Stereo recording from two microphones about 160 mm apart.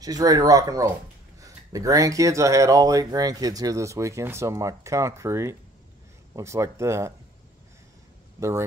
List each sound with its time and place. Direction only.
0.0 s speech: 25° right (ahead or behind)
8.4 s speech: 15° right (ahead or behind)